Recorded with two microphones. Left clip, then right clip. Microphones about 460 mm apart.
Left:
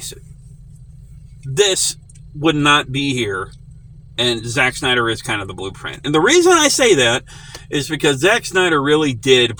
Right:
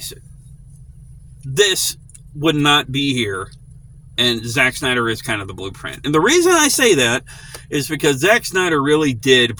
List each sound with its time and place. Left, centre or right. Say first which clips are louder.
1.5 s speech: even; right